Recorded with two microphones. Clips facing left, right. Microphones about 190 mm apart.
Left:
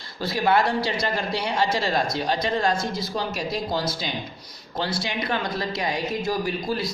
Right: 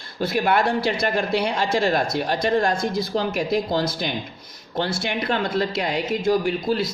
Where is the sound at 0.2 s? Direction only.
55° right (ahead or behind).